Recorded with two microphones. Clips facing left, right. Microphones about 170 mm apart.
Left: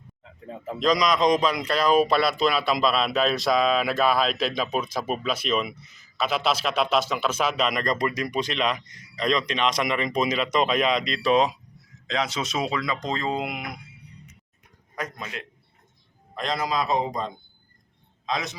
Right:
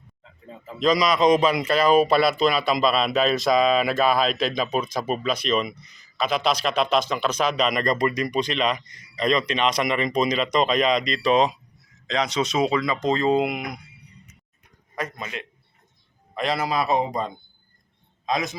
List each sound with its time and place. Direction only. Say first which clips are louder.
0.2 s a sound: left 4 dB; 65° left (ahead or behind)
0.8 s speech: right 2 dB; centre (ahead or behind)
14.9 s a man's voice: right 2 dB; centre (ahead or behind)
18.3 s a man's voice: right 4 dB; 50° right (ahead or behind)